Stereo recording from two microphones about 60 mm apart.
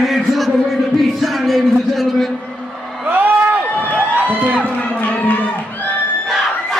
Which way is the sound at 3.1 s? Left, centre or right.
Right.